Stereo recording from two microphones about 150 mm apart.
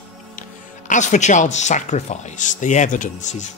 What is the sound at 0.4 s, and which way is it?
Speech, 55° left (ahead or behind).